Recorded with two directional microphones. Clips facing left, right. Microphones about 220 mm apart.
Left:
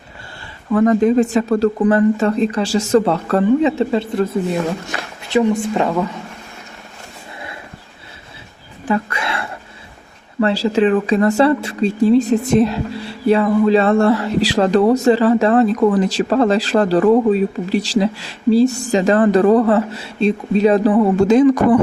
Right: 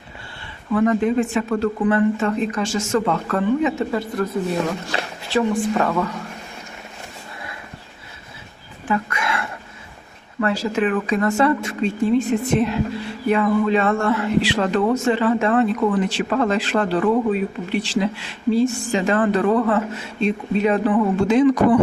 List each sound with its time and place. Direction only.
0.7 s speech: 40° left (ahead or behind); by 6.1 s 20° left (ahead or behind)
8.9 s a sound: 30° left (ahead or behind)
10.4 s speech: 30° left (ahead or behind); by 21.8 s 50° left (ahead or behind)